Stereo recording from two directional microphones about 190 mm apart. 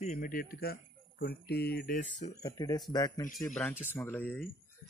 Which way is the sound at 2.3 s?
20° left (ahead or behind).